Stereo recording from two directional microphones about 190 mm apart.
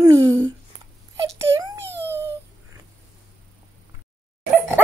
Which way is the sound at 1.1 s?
15° right (ahead or behind).